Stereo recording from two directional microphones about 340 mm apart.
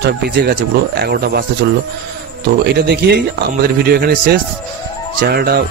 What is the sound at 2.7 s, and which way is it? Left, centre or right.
Speech, right.